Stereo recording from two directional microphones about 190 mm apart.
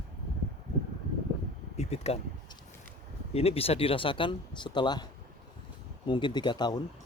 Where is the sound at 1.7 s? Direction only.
35° left (ahead or behind).